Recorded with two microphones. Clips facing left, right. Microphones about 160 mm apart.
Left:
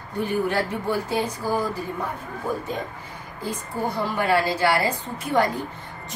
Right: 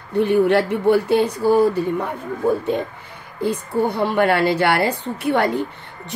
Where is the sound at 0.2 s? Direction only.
65° right (ahead or behind).